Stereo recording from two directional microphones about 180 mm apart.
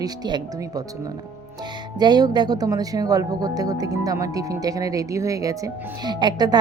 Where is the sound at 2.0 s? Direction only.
25° right (ahead or behind).